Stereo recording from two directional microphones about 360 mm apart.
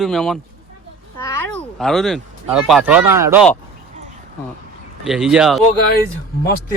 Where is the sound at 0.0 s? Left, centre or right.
Centre.